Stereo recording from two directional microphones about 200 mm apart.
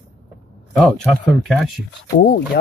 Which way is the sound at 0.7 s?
Centre (ahead or behind).